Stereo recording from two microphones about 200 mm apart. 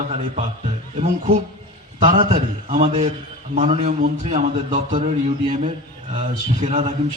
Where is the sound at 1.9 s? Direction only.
35° right (ahead or behind).